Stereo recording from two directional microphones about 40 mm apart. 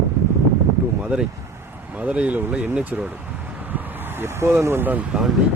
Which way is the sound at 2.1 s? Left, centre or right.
Right.